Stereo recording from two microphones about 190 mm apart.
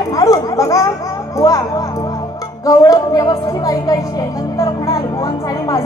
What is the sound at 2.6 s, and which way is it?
Speech, 20° left (ahead or behind).